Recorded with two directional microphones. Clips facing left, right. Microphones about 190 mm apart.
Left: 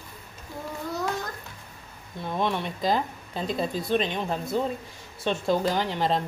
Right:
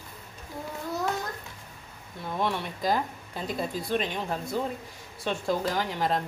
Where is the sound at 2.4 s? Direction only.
20° left (ahead or behind).